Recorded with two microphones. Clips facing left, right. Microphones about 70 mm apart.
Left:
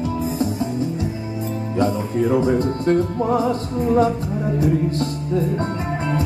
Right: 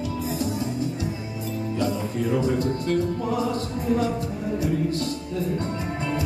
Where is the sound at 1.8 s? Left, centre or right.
Left.